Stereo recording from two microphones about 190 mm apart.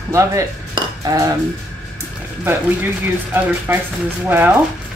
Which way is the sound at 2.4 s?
10° right (ahead or behind).